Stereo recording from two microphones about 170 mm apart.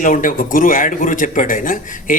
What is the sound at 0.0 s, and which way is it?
Speech, 50° left (ahead or behind).